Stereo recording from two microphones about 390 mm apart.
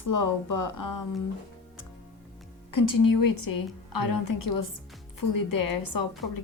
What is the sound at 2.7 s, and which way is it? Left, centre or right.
A woman's voice, left.